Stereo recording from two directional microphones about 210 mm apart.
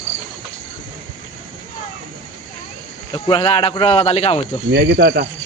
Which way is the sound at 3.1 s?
25° left (ahead or behind).